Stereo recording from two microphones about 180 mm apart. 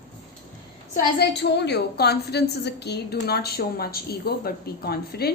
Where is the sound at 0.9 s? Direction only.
65° left (ahead or behind).